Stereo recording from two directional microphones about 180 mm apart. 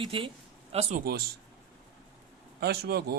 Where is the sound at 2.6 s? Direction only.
60° right (ahead or behind).